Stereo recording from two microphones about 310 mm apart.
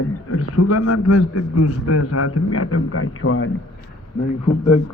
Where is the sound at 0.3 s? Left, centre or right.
Left.